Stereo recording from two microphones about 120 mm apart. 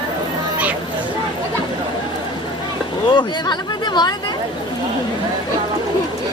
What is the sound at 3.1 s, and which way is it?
Speech, 40° left (ahead or behind).